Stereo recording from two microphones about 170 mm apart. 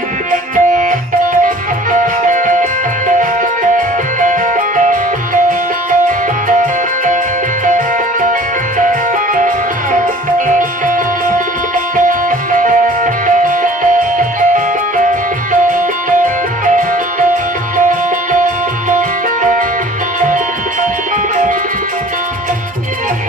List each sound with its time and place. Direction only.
0.3 s music: 50° right (ahead or behind)
3.7 s music: 50° right (ahead or behind)
8.3 s music: 50° right (ahead or behind)
18.9 s music: 50° right (ahead or behind)